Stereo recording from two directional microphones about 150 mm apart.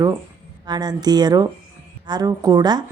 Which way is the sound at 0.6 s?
25° right (ahead or behind).